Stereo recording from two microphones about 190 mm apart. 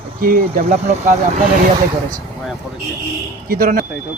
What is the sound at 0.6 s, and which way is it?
Speech, 35° right (ahead or behind).